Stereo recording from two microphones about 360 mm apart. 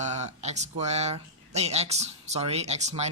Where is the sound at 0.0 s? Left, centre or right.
Centre.